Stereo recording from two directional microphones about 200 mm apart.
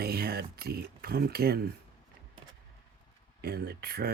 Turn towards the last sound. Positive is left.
turn(degrees=-50)  # may be behind; listen again after turning